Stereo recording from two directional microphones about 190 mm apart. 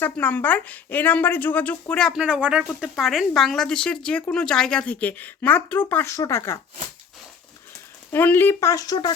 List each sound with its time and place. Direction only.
0.0 s speech: 10° left (ahead or behind)
8.1 s speech: 10° left (ahead or behind)